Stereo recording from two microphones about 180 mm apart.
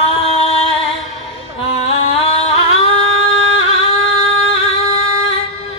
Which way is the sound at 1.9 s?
35° left (ahead or behind).